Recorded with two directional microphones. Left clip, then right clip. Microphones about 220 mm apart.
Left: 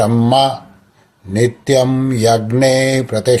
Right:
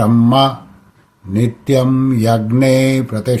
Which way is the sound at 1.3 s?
15° left (ahead or behind).